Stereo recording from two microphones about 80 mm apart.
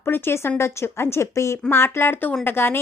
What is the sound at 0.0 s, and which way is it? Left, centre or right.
Speech, left.